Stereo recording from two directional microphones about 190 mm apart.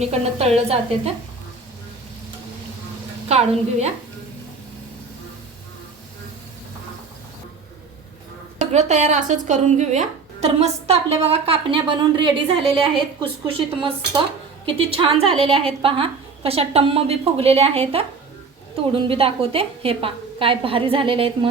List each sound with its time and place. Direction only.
0.0 s speech: 35° right (ahead or behind)
3.2 s speech: 35° right (ahead or behind)
8.5 s a woman's voice: 35° right (ahead or behind)